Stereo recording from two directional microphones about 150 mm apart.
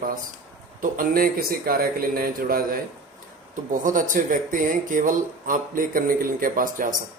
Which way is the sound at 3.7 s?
60° right (ahead or behind).